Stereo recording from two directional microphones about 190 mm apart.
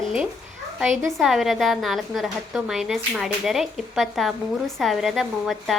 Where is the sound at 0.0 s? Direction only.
Centre (ahead or behind).